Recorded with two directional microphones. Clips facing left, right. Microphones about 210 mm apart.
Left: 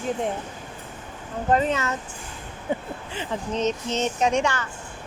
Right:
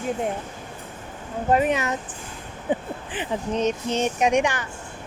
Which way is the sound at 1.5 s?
15° right (ahead or behind).